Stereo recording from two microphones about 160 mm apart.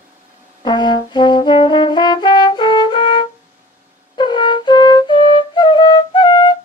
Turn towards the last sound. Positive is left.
turn(degrees=30)  # may be behind; listen again after turning